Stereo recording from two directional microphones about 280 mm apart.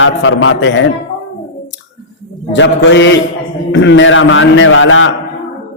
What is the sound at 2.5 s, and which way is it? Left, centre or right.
A man's voice, left.